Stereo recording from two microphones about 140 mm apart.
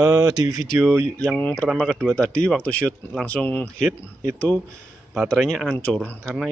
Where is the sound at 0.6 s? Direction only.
5° left (ahead or behind).